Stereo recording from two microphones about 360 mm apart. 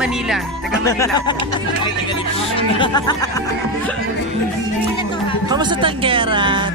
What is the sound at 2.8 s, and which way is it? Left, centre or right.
Speech, centre.